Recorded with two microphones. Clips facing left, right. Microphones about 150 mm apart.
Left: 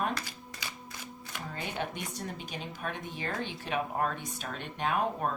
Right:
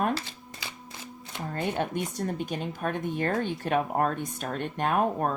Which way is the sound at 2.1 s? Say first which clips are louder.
Right 8 dB; 50° right (ahead or behind).